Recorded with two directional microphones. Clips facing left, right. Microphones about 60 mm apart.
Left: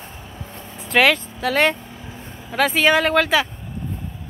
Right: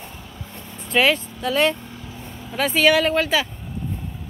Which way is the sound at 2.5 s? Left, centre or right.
Left.